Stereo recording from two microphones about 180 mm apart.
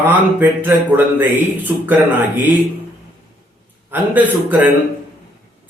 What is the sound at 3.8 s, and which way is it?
Speech, 10° right (ahead or behind).